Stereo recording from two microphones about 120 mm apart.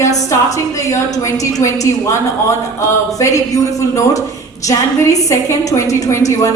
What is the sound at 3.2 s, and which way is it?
A woman's voice, 25° left (ahead or behind).